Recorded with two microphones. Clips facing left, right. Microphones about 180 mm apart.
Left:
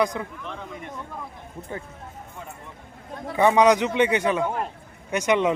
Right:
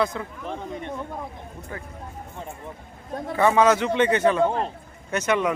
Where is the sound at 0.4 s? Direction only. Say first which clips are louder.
Right 4 dB; 35° right (ahead or behind).